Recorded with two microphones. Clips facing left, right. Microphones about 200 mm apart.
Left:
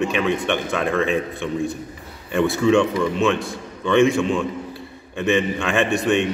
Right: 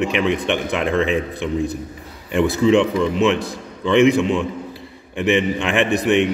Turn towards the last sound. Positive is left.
turn(degrees=-20)  # may be behind; listen again after turning